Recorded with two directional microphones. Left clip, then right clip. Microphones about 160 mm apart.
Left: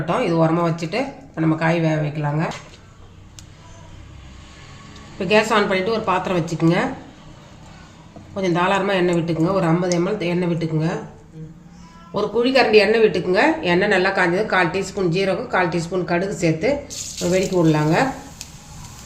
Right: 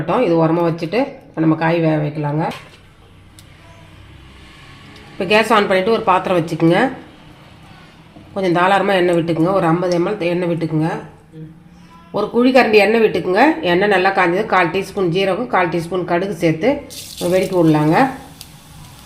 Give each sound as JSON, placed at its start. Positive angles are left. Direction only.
{"t": 0.1, "sound": "a woman's voice", "side_deg": -40}
{"t": 5.1, "sound": "a woman's voice", "side_deg": -35}
{"t": 8.4, "sound": "a woman's voice", "side_deg": -35}
{"t": 12.1, "sound": "a woman's voice", "side_deg": -40}